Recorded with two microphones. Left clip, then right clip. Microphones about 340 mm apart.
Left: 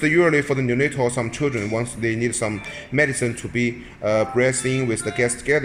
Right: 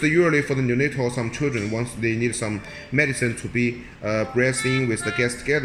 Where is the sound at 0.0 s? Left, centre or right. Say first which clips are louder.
Left 2 dB; centre.